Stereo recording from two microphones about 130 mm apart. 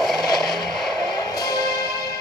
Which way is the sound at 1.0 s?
30° left (ahead or behind).